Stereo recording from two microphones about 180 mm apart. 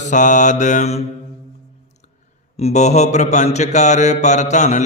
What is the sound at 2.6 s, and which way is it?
Mantra, 35° left (ahead or behind).